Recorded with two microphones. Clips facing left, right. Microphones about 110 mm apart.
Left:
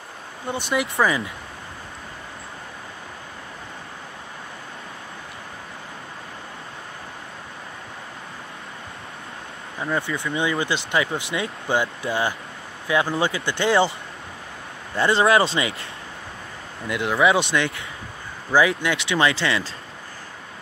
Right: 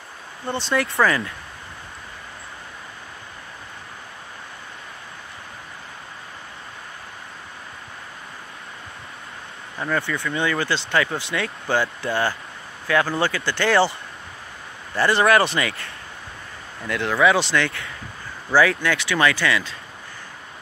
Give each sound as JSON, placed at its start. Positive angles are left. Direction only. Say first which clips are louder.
{"t": 0.8, "sound": "speech", "louder": "right 1 dB", "side_deg": 15}
{"t": 9.8, "sound": "speech", "louder": "right 1 dB", "side_deg": 25}
{"t": 15.0, "sound": "speech", "louder": "even", "side_deg": 25}